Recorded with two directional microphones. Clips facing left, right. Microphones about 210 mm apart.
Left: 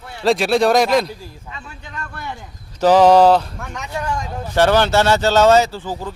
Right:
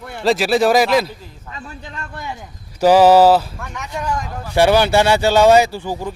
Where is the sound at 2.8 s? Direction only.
10° right (ahead or behind).